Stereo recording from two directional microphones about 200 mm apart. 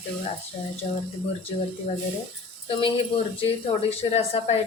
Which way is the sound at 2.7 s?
25° left (ahead or behind).